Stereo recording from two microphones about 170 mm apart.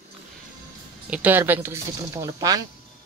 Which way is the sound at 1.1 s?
10° right (ahead or behind).